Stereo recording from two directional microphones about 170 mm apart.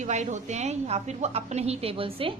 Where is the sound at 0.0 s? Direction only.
45° right (ahead or behind).